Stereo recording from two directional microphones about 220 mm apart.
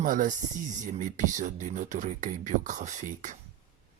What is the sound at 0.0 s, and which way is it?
Speech, 35° right (ahead or behind).